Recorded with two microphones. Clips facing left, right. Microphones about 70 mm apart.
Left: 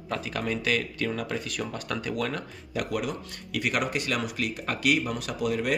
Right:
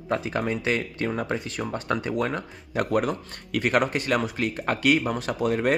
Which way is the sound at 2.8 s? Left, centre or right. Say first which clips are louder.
Right 6 dB; right.